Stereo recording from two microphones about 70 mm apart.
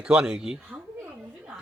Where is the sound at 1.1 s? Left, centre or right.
Right.